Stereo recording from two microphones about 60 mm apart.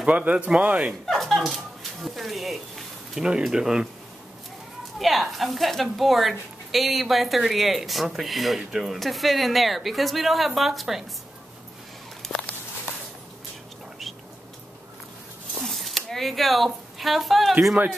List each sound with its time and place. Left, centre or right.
0.0 s speech: right
1.0 s speech: centre
3.2 s speech: centre
4.9 s a woman's voice: centre
12.2 s a sound: centre
15.6 s speech: centre